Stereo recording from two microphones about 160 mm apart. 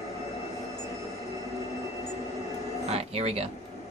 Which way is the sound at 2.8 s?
40° right (ahead or behind).